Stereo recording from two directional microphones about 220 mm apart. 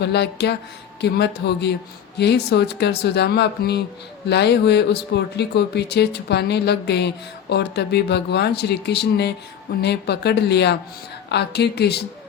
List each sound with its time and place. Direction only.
0.0 s speech: 50° left (ahead or behind)